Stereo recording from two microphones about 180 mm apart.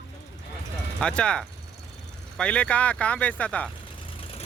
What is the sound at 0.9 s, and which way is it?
Speech, 5° left (ahead or behind).